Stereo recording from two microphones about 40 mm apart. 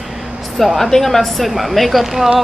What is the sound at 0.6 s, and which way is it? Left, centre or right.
Speech, centre.